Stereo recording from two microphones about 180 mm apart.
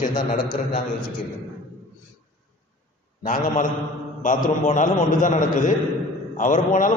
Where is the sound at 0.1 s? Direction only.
25° left (ahead or behind).